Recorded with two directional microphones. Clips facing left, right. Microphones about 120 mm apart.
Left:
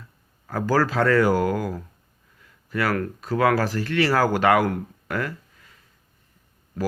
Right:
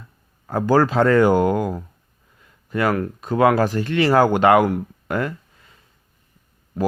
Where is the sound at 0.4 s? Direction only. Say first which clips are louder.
Right 5 dB; 25° right (ahead or behind).